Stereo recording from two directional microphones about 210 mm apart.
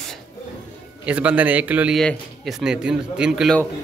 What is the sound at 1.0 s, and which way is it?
Speech, 5° right (ahead or behind).